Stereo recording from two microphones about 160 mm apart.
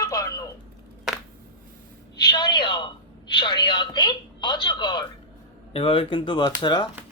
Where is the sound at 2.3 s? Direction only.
30° left (ahead or behind).